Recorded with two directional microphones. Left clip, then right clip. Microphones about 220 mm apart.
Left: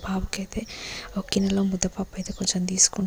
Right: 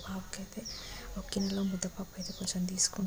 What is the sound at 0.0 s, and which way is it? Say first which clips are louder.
Speech: left 12 dB; 35° left (ahead or behind).